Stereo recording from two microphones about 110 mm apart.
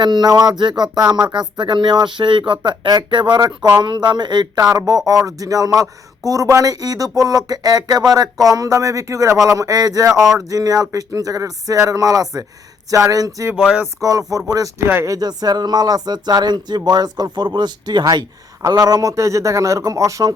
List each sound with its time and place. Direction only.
0.0 s speech: 40° right (ahead or behind)
13.6 s a sound: 5° right (ahead or behind)
14.0 s speech: 35° right (ahead or behind)
14.8 s speech: 20° right (ahead or behind)
15.1 s speech: 35° right (ahead or behind)